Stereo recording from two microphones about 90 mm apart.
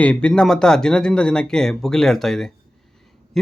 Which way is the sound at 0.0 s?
10° left (ahead or behind).